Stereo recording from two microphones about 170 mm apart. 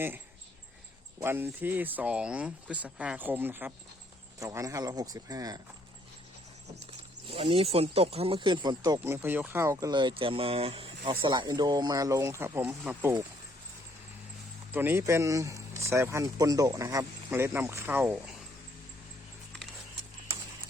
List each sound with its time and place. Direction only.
1.2 s speech: 15° right (ahead or behind)
7.3 s speech: 35° right (ahead or behind); by 13.1 s 10° right (ahead or behind)
14.7 s speech: 10° right (ahead or behind)